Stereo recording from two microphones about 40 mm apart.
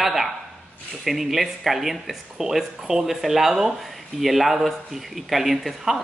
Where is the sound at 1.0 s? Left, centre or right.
Centre.